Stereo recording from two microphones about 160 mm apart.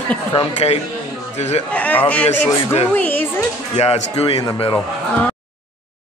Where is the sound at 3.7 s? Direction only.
40° left (ahead or behind).